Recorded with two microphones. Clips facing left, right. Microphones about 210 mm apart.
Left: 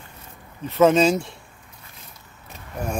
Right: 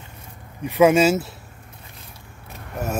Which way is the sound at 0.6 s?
15° right (ahead or behind).